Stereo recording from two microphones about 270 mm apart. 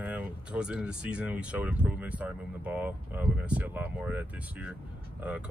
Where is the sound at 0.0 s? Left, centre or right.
Centre.